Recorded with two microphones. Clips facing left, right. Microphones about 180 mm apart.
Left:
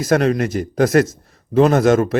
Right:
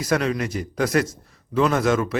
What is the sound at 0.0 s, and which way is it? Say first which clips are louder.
Speech: left 6 dB; 45° left (ahead or behind).